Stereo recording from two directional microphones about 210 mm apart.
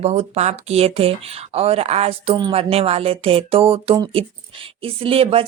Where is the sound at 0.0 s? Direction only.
30° right (ahead or behind).